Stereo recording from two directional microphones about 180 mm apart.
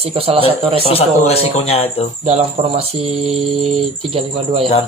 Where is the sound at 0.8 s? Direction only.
35° left (ahead or behind).